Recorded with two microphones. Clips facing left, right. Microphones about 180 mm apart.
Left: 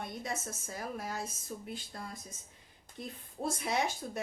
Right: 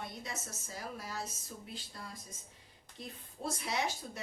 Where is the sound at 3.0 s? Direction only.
55° left (ahead or behind).